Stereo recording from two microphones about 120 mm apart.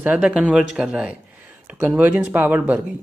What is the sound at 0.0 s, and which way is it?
Speech, 10° right (ahead or behind).